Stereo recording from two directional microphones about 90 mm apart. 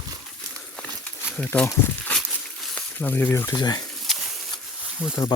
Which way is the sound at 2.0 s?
10° left (ahead or behind).